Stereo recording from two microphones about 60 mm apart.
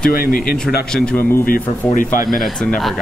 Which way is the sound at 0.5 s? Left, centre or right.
Centre.